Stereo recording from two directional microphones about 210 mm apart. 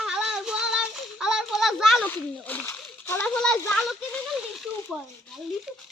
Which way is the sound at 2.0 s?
5° left (ahead or behind).